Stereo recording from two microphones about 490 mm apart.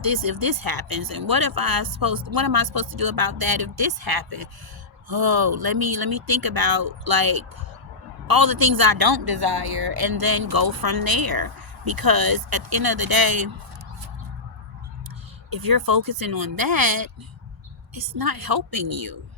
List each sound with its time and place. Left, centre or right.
0.0 s speech: right
15.4 s speech: right